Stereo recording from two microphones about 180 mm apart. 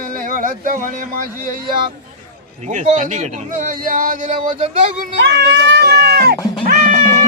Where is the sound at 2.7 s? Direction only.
40° right (ahead or behind).